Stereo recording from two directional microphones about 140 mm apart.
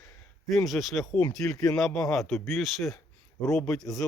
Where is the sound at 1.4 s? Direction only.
20° left (ahead or behind).